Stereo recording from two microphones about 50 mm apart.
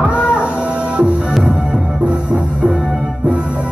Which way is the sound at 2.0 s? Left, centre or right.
Right.